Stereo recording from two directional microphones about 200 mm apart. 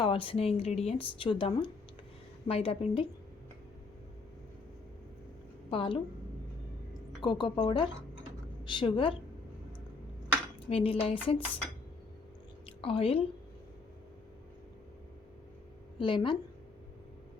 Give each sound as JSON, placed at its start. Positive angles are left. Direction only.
{"t": 0.0, "sound": "a woman's voice", "side_deg": 25}
{"t": 5.7, "sound": "a woman's voice", "side_deg": 25}
{"t": 7.2, "sound": "a woman's voice", "side_deg": 25}
{"t": 10.7, "sound": "a woman's voice", "side_deg": 30}
{"t": 12.6, "sound": "a sound", "side_deg": 25}
{"t": 16.0, "sound": "a woman's voice", "side_deg": 25}